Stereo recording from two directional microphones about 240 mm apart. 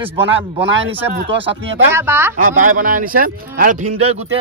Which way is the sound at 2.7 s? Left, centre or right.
Right.